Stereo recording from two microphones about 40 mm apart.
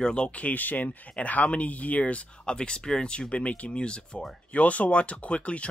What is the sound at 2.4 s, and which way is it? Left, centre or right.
Speech, left.